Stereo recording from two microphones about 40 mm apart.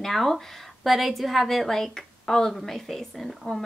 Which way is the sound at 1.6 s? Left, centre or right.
Centre.